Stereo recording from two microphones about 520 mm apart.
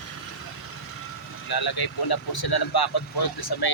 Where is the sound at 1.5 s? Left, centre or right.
Left.